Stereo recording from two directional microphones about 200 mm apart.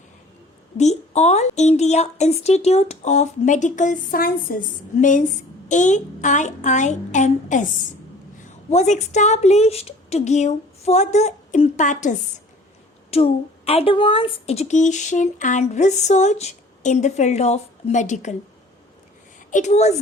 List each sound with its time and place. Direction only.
0.8 s a woman's voice: 35° left (ahead or behind)
8.7 s a woman's voice: 35° left (ahead or behind)
19.5 s a woman's voice: 35° left (ahead or behind)